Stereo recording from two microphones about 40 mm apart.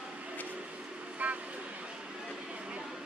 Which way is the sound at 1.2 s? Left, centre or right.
Right.